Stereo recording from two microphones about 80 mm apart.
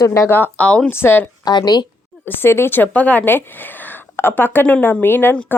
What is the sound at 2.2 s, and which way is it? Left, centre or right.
A woman's voice, left.